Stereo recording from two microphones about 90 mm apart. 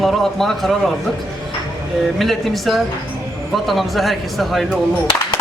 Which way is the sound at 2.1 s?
Centre (ahead or behind).